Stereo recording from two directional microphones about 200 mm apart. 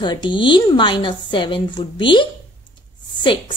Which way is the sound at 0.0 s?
25° left (ahead or behind).